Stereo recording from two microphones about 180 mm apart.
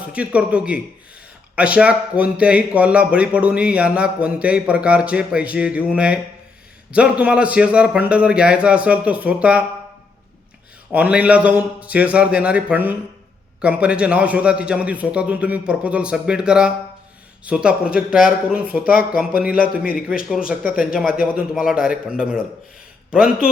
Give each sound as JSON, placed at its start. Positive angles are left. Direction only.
{"t": 0.1, "sound": "speech", "side_deg": -5}
{"t": 10.9, "sound": "speech", "side_deg": -10}
{"t": 19.5, "sound": "a man's voice", "side_deg": 55}
{"t": 20.5, "sound": "speech", "side_deg": -5}